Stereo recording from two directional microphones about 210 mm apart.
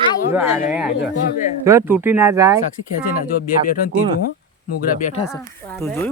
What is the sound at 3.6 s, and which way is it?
Speech, 45° left (ahead or behind).